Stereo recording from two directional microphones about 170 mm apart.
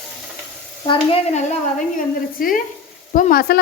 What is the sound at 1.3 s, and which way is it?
Speech, 40° left (ahead or behind).